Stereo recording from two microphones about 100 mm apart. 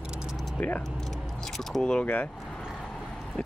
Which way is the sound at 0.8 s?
Centre (ahead or behind).